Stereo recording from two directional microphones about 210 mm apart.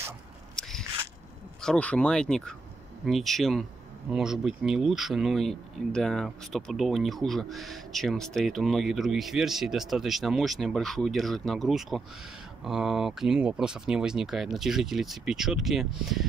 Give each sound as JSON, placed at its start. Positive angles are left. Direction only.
{"t": 0.6, "sound": "biting", "side_deg": 0}
{"t": 1.6, "sound": "speech", "side_deg": 5}